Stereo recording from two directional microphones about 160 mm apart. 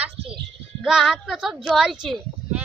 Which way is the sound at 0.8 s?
Centre (ahead or behind).